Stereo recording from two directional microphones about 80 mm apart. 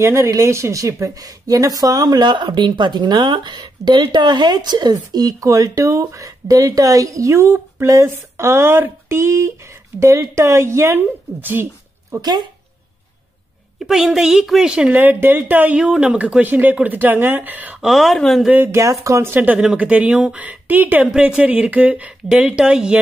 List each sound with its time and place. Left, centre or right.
0.0 s a woman's voice: right
12.2 s speech: right
13.7 s speech: centre
15.0 s speech: right
15.7 s speech: centre
17.7 s a woman's voice: centre
18.5 s speech: right
18.8 s a woman's voice: right
19.3 s speech: centre